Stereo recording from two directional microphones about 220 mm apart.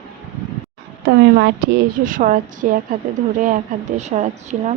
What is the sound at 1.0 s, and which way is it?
Speech, 50° right (ahead or behind).